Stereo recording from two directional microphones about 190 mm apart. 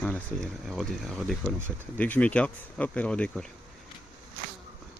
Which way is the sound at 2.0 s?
10° left (ahead or behind).